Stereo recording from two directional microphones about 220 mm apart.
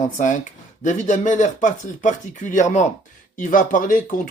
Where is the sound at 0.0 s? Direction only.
35° left (ahead or behind).